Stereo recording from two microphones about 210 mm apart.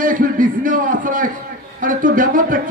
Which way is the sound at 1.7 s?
40° right (ahead or behind).